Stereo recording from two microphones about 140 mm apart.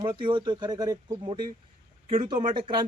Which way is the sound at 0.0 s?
35° right (ahead or behind).